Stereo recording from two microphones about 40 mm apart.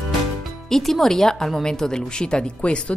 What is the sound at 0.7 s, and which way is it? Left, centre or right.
A woman's voice, centre.